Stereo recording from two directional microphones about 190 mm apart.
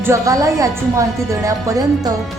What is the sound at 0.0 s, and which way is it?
A woman's voice, 15° right (ahead or behind).